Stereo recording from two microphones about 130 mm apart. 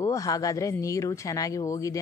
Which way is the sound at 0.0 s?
25° left (ahead or behind).